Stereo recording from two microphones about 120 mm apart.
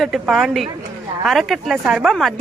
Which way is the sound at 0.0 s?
5° right (ahead or behind).